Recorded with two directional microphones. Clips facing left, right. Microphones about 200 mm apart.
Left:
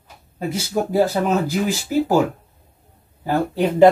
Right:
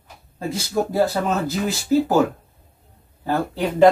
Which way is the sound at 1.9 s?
10° left (ahead or behind).